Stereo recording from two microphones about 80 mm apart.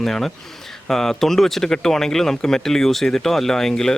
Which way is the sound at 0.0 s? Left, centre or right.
Centre.